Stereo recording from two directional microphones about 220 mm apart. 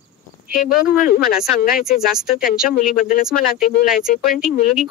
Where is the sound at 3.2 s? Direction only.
Centre (ahead or behind).